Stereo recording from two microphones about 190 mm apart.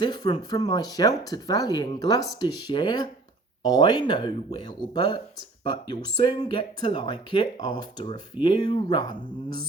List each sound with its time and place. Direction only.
0.0 s speech: 20° left (ahead or behind)